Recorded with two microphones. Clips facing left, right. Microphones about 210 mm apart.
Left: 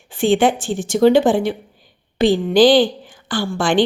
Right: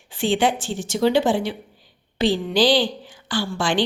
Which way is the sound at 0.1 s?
50° left (ahead or behind).